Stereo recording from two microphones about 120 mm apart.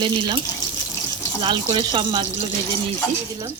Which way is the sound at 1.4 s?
40° right (ahead or behind).